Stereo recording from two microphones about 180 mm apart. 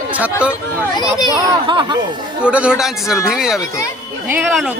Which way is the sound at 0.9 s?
20° left (ahead or behind).